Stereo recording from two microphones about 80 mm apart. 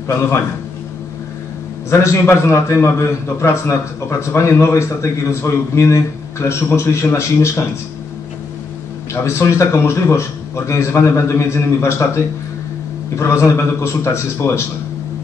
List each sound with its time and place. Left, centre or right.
1.9 s a man's voice: left
9.1 s a man's voice: left